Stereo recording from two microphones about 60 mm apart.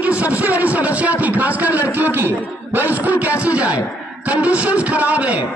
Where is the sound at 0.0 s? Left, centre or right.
Right.